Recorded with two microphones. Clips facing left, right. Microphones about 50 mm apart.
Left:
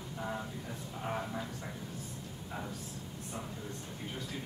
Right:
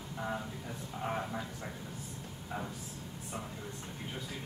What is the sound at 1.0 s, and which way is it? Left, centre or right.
Vehicle, centre.